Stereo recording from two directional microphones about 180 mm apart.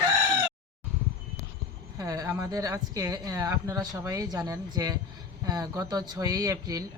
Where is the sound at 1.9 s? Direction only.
20° right (ahead or behind).